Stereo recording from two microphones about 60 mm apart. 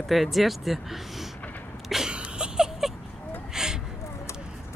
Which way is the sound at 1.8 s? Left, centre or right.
Centre.